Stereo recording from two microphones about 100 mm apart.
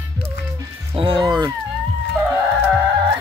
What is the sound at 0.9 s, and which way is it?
Music, 55° right (ahead or behind).